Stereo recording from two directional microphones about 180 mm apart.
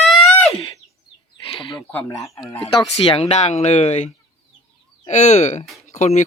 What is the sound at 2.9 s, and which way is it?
Speech, 30° left (ahead or behind).